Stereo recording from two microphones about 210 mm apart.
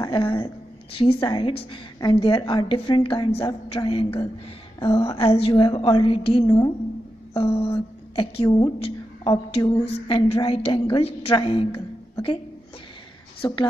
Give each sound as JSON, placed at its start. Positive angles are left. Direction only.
{"t": 0.0, "sound": "a sound", "side_deg": 20}
{"t": 0.9, "sound": "a woman's voice", "side_deg": 25}
{"t": 13.4, "sound": "a woman's voice", "side_deg": 20}